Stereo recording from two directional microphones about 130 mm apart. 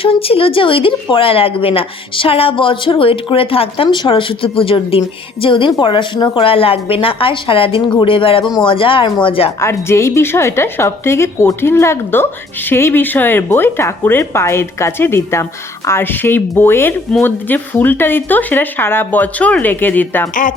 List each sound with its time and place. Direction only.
0.0 s speech: 45° left (ahead or behind)
9.6 s a woman's voice: 20° left (ahead or behind)